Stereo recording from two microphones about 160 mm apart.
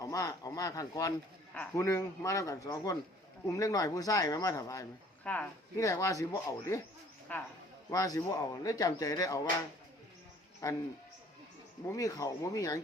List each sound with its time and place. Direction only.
0.0 s speech: 20° left (ahead or behind)
5.2 s speech: 10° left (ahead or behind)
5.7 s speech: 20° left (ahead or behind)
7.9 s speech: 20° left (ahead or behind)
10.6 s speech: 20° left (ahead or behind)
11.9 s speech: 20° left (ahead or behind)